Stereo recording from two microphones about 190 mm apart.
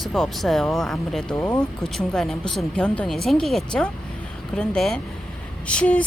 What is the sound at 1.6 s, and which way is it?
A woman's voice, 5° left (ahead or behind).